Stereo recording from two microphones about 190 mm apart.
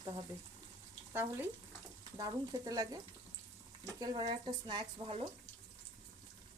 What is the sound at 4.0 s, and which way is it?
Speech, 20° right (ahead or behind).